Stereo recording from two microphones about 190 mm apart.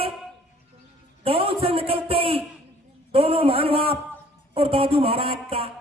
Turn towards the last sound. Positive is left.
turn(degrees=-30)  # may be behind; listen again after turning